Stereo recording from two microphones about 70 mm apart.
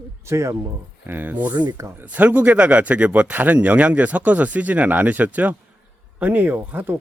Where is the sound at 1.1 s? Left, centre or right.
Right.